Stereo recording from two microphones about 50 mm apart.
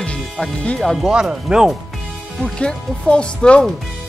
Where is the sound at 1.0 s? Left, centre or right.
Centre.